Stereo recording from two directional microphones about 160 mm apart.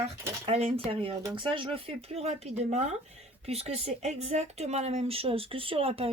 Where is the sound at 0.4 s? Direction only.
40° right (ahead or behind).